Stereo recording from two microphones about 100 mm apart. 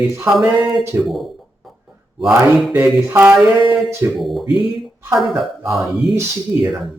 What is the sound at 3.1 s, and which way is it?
Mantra, 15° right (ahead or behind).